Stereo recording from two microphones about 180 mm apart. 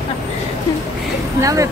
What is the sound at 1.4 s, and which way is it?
Speech, 15° right (ahead or behind).